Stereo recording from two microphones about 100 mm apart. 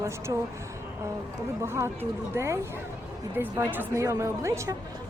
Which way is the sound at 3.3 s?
20° right (ahead or behind).